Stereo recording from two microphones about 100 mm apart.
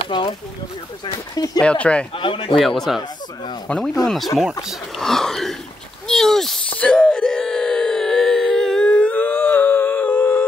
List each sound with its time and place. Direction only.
0.1 s speech: 50° left (ahead or behind)
1.3 s speech: 40° left (ahead or behind)
1.6 s speech: 10° left (ahead or behind)
2.1 s speech: 60° left (ahead or behind)
2.5 s speech: 5° left (ahead or behind)
6.0 s a sound: 5° left (ahead or behind)
6.8 s wail: 10° left (ahead or behind)